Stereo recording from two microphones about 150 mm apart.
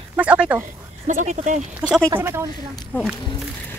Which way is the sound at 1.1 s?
55° right (ahead or behind).